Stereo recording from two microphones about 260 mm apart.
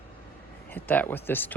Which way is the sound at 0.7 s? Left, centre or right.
Centre.